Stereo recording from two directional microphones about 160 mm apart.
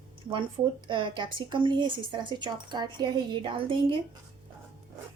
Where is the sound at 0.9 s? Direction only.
30° right (ahead or behind).